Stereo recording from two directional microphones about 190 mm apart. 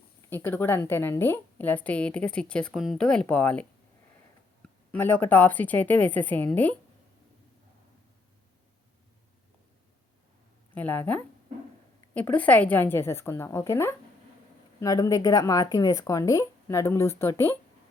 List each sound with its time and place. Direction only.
0.3 s speech: 10° left (ahead or behind)
4.9 s speech: 10° left (ahead or behind)
10.8 s speech: 10° left (ahead or behind)